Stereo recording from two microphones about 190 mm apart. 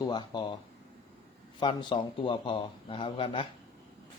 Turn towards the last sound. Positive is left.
turn(degrees=30)  # may be behind; listen again after turning